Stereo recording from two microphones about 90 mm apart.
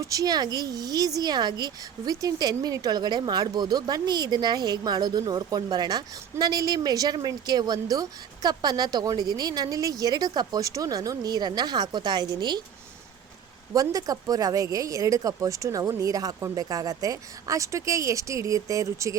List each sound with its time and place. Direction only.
0.0 s a woman's voice: 40° right (ahead or behind)
13.7 s speech: 45° right (ahead or behind)